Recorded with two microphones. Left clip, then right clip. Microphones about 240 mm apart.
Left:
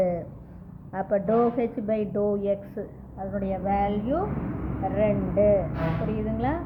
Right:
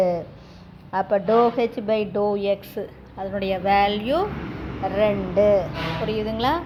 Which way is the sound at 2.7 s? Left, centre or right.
Right.